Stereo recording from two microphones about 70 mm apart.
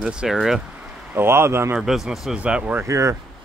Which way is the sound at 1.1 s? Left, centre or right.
Right.